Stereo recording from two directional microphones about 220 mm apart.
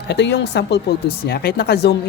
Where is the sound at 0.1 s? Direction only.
50° left (ahead or behind).